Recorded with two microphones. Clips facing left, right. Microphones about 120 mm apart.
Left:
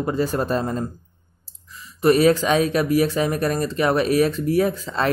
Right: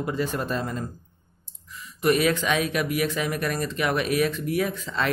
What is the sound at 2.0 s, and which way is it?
Speech, 35° left (ahead or behind).